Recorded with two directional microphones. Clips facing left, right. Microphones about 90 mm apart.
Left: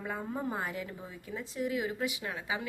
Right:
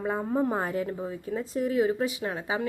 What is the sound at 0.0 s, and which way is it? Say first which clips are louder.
A woman's voice: right 9 dB; 35° right (ahead or behind).